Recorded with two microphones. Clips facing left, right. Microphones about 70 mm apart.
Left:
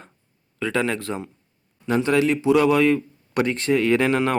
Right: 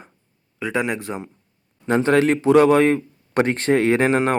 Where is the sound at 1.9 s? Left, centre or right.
Right.